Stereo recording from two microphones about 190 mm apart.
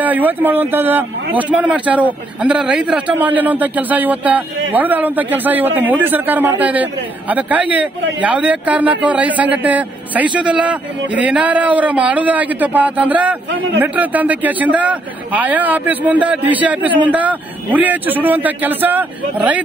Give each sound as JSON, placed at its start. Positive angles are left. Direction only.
{"t": 0.0, "sound": "a man's voice", "side_deg": -10}